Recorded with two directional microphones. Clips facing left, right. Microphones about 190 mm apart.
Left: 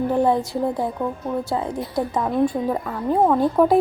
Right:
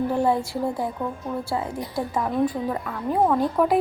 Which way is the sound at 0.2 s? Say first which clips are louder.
Left 3 dB; 20° left (ahead or behind).